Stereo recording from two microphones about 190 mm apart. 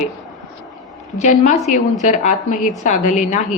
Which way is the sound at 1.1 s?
40° left (ahead or behind).